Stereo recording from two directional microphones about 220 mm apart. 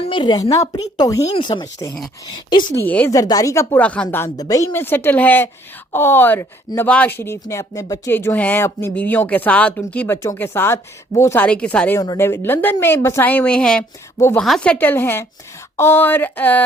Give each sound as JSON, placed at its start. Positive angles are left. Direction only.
{"t": 0.0, "sound": "speech", "side_deg": 20}
{"t": 2.8, "sound": "speech", "side_deg": 10}